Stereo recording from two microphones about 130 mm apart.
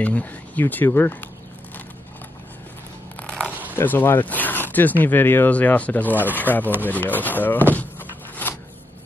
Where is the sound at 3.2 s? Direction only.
10° left (ahead or behind).